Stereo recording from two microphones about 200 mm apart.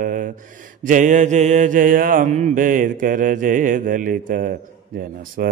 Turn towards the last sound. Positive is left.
turn(degrees=-45)  # may be behind; listen again after turning